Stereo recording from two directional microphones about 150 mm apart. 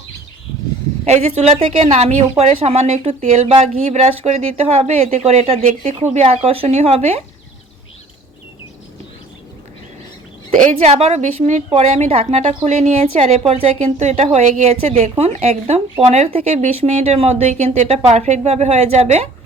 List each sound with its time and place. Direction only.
1.0 s speech: 45° right (ahead or behind)
10.5 s speech: 55° right (ahead or behind)